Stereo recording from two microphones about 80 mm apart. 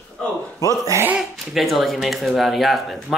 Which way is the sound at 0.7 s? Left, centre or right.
Right.